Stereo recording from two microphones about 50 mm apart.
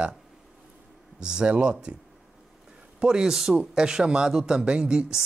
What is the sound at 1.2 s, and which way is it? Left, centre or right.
Speech, right.